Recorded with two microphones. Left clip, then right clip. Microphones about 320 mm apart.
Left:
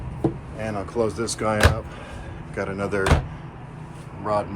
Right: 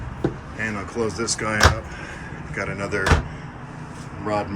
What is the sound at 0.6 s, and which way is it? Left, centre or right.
Speech, centre.